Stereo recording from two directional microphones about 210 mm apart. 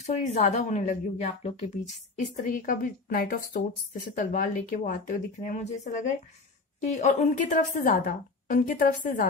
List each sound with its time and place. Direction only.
0.0 s a woman's voice: 35° left (ahead or behind)